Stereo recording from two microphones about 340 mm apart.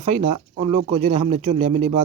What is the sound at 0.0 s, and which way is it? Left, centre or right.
A man's voice, centre.